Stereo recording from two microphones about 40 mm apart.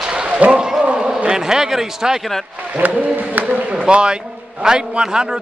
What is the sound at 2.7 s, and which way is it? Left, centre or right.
Speech, right.